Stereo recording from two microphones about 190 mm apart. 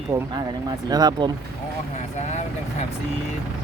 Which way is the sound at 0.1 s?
15° right (ahead or behind).